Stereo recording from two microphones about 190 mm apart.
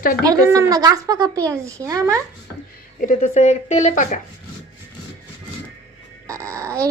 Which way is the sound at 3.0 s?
45° left (ahead or behind).